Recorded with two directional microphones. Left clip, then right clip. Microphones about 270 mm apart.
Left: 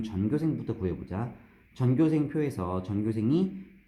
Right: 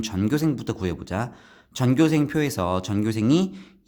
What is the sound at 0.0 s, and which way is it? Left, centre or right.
Speech, right.